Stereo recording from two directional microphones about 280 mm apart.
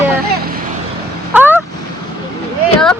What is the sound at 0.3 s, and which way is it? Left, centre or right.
Vehicle, right.